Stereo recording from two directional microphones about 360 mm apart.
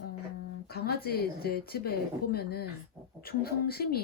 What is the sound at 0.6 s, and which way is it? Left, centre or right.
A woman's voice, left.